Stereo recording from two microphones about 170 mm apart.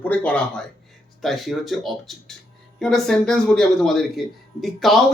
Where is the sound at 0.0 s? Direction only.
10° left (ahead or behind).